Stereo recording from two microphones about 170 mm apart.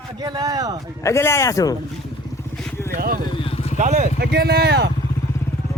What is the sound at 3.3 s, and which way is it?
Vehicle, 35° left (ahead or behind).